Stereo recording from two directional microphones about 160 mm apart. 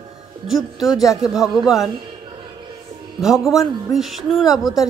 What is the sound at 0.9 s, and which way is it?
Speech, 20° left (ahead or behind).